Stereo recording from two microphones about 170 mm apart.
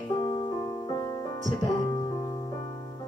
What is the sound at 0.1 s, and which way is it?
Music, 25° left (ahead or behind).